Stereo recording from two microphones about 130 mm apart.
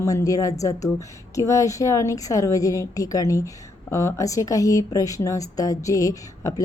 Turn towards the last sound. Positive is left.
turn(degrees=25)  # may be behind; listen again after turning